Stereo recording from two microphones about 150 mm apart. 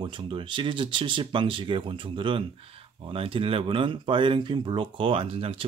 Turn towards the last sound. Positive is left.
turn(degrees=-35)  # may be behind; listen again after turning